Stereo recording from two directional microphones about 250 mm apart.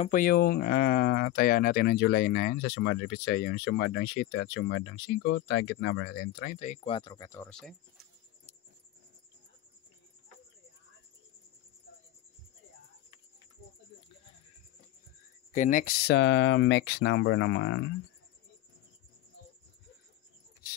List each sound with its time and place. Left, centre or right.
0.0 s speech: left; by 7.7 s centre
15.5 s speech: left